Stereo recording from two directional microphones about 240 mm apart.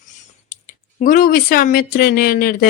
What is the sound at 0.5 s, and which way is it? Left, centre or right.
Speech, left.